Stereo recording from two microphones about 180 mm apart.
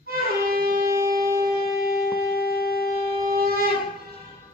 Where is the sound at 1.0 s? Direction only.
55° right (ahead or behind).